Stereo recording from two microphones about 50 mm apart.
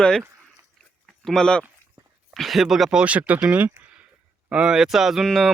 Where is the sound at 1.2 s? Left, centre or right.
Centre.